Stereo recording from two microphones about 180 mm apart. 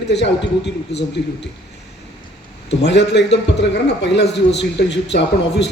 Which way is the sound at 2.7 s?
70° left (ahead or behind).